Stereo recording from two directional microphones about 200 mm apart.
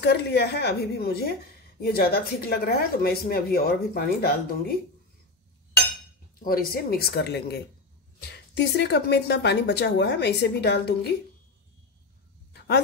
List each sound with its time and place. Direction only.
0.0 s a woman's voice: 55° left (ahead or behind)
6.4 s a woman's voice: 45° left (ahead or behind)